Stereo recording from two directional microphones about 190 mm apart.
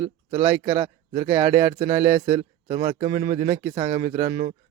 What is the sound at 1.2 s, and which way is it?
Speech, 10° right (ahead or behind).